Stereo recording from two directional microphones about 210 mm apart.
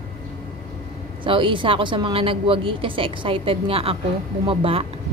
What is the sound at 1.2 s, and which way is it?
A woman's voice, 25° right (ahead or behind).